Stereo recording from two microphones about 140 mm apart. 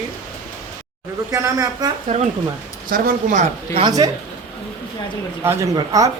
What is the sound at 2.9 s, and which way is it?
Speech, 75° right (ahead or behind).